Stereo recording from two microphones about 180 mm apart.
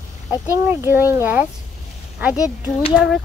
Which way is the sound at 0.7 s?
10° right (ahead or behind).